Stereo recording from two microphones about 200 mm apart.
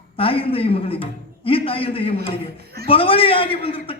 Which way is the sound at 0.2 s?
25° left (ahead or behind).